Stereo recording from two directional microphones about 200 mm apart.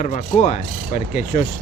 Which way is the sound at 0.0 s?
35° left (ahead or behind).